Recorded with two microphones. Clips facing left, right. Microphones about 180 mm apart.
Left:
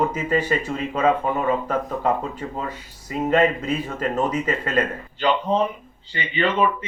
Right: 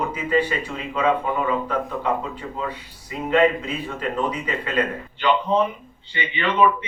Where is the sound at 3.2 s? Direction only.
45° left (ahead or behind).